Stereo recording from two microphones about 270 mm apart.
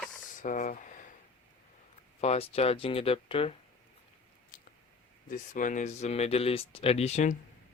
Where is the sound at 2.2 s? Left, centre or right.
Left.